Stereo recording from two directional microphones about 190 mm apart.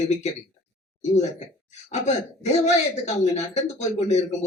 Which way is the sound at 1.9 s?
35° left (ahead or behind).